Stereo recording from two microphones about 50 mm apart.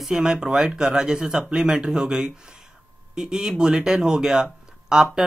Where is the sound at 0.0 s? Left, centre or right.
Centre.